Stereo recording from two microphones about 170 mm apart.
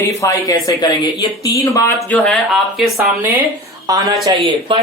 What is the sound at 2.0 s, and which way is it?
Speech, 5° left (ahead or behind).